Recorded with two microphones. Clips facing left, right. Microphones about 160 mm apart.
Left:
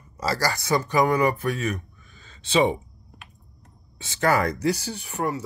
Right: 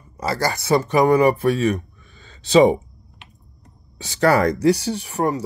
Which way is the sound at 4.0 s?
35° right (ahead or behind).